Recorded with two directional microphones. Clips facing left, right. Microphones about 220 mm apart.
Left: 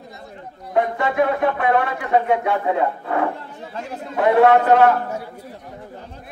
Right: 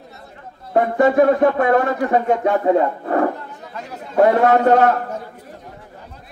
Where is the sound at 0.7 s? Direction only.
45° right (ahead or behind).